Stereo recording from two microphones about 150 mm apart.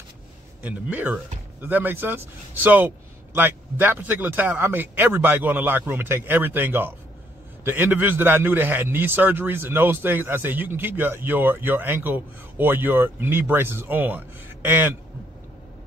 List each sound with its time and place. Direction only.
0.6 s a man's voice: 10° right (ahead or behind)